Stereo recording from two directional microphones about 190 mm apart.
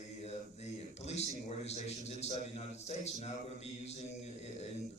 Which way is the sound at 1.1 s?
35° left (ahead or behind).